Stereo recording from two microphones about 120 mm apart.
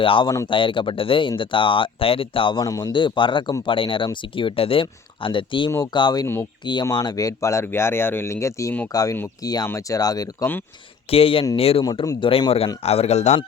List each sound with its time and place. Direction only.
0.0 s speech: 45° left (ahead or behind)
2.6 s speech: 30° left (ahead or behind)
2.9 s speech: 45° left (ahead or behind)
11.1 s speech: 50° left (ahead or behind)
11.8 s speech: 35° left (ahead or behind)
12.2 s speech: 45° left (ahead or behind); by 13.4 s 65° left (ahead or behind)